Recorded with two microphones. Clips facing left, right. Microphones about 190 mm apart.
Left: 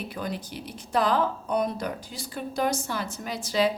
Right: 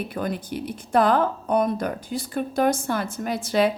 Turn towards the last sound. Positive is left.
turn(degrees=-55)  # may be behind; listen again after turning